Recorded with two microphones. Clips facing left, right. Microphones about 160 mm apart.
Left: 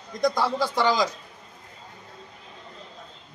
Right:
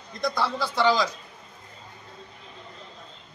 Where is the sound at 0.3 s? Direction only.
15° left (ahead or behind).